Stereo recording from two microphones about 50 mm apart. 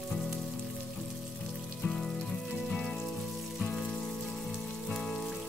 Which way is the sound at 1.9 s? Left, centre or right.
Centre.